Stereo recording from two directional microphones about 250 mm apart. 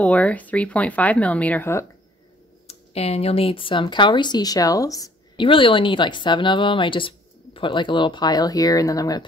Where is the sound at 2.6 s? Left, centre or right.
Left.